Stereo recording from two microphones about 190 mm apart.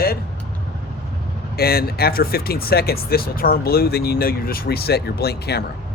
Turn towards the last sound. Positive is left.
turn(degrees=55)  # may be behind; listen again after turning